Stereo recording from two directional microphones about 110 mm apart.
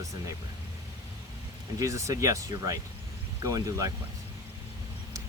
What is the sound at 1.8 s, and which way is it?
Speech, 30° right (ahead or behind).